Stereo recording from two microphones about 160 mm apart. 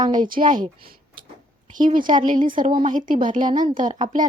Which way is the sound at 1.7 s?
60° right (ahead or behind).